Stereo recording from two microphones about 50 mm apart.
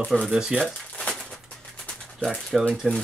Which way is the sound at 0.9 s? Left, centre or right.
Centre.